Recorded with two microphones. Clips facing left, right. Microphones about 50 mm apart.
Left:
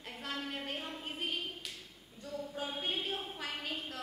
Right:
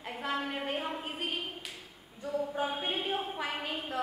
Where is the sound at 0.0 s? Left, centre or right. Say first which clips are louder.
Right 7 dB; centre.